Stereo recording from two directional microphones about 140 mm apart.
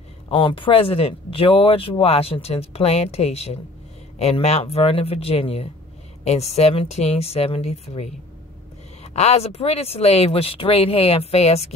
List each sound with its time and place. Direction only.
0.3 s speech: 35° left (ahead or behind)